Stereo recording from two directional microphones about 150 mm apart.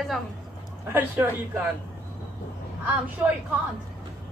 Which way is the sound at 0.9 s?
15° right (ahead or behind).